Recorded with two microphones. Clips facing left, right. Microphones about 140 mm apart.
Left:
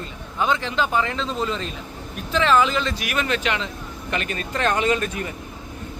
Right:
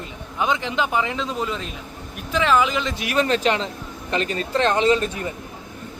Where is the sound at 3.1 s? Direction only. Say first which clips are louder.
Right 8 dB; 35° right (ahead or behind).